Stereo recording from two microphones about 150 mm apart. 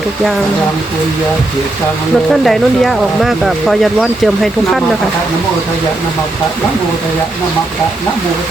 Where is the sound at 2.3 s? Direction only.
Centre (ahead or behind).